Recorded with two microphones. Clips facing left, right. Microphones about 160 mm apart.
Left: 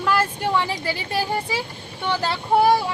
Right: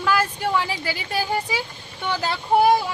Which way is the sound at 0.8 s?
30° left (ahead or behind).